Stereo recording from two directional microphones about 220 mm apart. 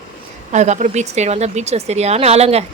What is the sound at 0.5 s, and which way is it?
Speech, 30° right (ahead or behind).